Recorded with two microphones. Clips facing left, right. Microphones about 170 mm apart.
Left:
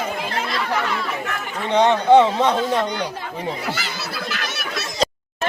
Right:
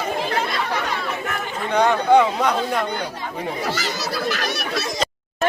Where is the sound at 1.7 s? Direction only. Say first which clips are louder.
Left 2 dB; 25° left (ahead or behind).